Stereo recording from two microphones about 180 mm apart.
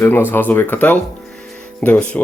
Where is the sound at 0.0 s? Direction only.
10° left (ahead or behind).